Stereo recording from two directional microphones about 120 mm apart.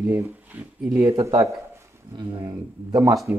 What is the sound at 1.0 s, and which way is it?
Speech, 25° right (ahead or behind).